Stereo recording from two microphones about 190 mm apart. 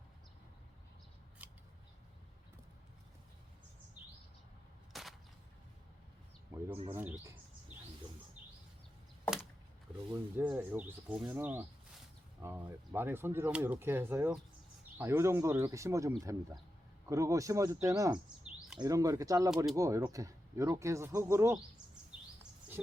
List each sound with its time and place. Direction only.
1.4 s scissors: 5° right (ahead or behind)
4.9 s a sound: centre (ahead or behind)
6.5 s bird: 20° right (ahead or behind)
6.9 s speech: 10° right (ahead or behind)
10.1 s speech: 10° right (ahead or behind)